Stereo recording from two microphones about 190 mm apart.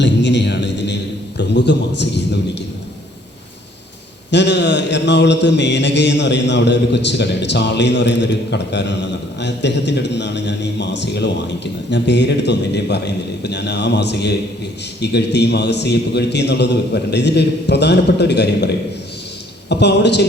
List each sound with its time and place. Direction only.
0.0 s a sound: 70° left (ahead or behind)
1.4 s a man's voice: 65° left (ahead or behind)
4.3 s mantra: 65° left (ahead or behind)
13.4 s a man's voice: 60° left (ahead or behind)